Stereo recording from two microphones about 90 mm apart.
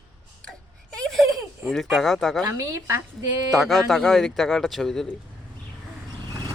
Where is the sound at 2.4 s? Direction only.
35° right (ahead or behind).